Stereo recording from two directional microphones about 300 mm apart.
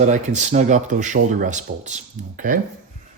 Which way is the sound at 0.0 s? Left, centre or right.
Right.